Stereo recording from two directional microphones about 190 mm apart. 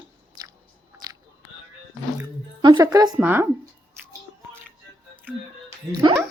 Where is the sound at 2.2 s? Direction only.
20° right (ahead or behind).